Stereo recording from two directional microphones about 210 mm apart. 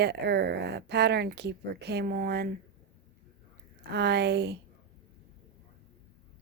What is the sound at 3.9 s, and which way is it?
Speech, 55° right (ahead or behind).